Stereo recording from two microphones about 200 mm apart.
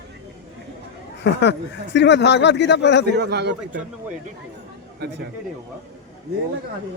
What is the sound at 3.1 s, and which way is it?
Speech, 55° right (ahead or behind).